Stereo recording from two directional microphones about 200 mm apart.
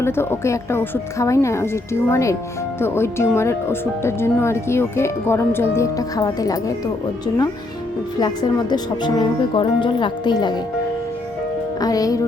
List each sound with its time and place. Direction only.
0.0 s speech: 10° left (ahead or behind)
8.2 s speech: 20° left (ahead or behind)
11.8 s speech: 20° left (ahead or behind)